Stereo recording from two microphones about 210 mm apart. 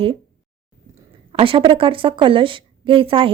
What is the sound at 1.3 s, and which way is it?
A woman's voice, 25° right (ahead or behind).